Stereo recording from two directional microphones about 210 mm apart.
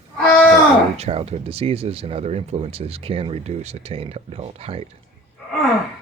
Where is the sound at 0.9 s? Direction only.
30° right (ahead or behind).